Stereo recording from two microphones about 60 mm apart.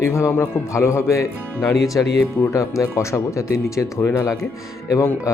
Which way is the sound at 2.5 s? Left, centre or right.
Left.